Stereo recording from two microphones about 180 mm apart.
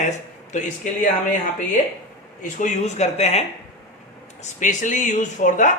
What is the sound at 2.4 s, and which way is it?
Speech, 40° left (ahead or behind).